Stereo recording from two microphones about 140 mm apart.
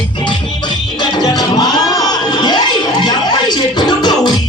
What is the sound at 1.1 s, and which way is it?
Music, 30° left (ahead or behind).